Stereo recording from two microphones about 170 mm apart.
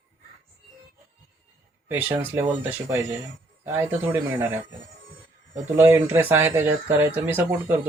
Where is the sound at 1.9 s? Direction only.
10° right (ahead or behind).